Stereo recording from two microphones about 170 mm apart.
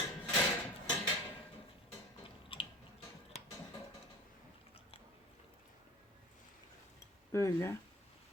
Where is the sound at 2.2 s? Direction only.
30° left (ahead or behind).